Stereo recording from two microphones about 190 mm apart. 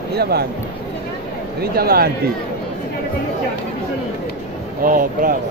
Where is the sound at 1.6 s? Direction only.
55° right (ahead or behind).